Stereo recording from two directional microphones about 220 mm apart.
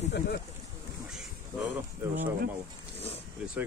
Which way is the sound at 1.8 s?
10° right (ahead or behind).